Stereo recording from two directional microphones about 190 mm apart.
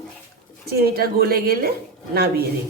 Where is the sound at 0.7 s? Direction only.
55° right (ahead or behind).